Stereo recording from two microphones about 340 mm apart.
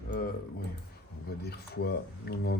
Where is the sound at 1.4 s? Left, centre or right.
Left.